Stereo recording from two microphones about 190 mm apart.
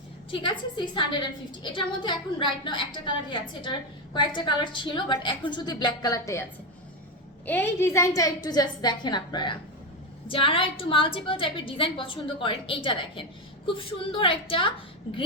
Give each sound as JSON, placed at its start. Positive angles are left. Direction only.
{"t": 0.3, "sound": "a woman's voice", "side_deg": 25}
{"t": 7.4, "sound": "a woman's voice", "side_deg": 10}